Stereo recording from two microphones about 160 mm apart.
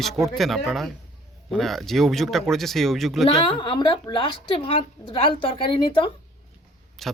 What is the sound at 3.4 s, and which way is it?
A woman's voice, 30° left (ahead or behind).